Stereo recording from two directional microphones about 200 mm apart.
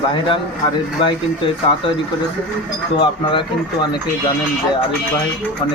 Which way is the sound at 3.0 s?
25° left (ahead or behind).